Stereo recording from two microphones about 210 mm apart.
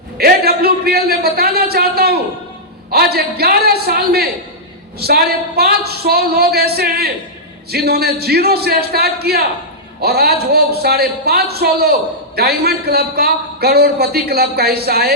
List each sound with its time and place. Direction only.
0.2 s a man's voice: 45° right (ahead or behind)